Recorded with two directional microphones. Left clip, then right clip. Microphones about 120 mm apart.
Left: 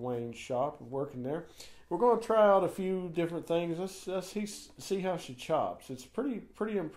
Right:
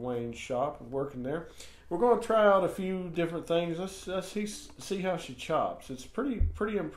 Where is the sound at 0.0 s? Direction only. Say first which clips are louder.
Right 2 dB; 30° left (ahead or behind).